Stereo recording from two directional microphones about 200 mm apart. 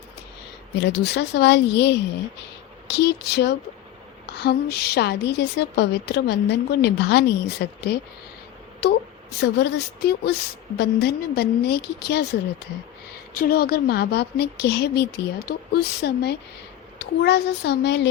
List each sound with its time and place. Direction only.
0.8 s a woman's voice: 55° left (ahead or behind)